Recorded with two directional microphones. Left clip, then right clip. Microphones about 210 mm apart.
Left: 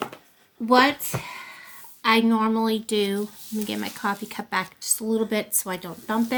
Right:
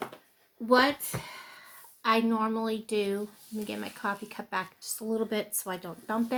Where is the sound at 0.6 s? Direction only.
35° left (ahead or behind).